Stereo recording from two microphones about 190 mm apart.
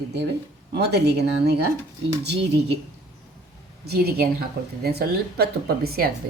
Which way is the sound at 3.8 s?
55° right (ahead or behind).